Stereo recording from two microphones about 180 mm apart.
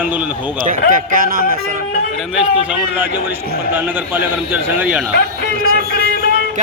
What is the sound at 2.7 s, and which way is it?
A man's voice, 10° right (ahead or behind).